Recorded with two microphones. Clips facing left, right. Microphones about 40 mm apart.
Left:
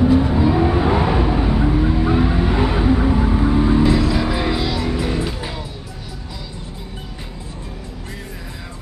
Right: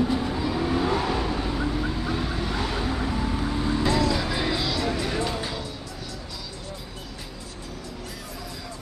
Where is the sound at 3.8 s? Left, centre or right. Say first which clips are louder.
Left 6 dB; centre.